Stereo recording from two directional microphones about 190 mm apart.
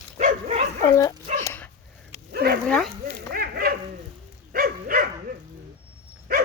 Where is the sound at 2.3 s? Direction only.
55° right (ahead or behind).